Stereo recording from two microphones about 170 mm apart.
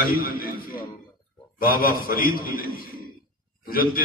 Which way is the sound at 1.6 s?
60° left (ahead or behind).